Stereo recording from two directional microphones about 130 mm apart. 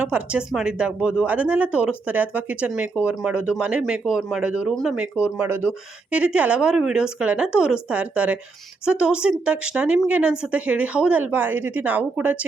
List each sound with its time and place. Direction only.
0.0 s speech: 10° right (ahead or behind)